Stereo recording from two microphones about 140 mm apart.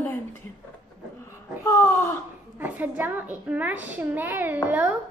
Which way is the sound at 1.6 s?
20° left (ahead or behind).